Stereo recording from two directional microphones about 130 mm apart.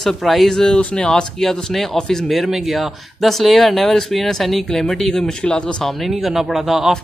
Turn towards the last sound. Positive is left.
turn(degrees=0)  # may be behind; listen again after turning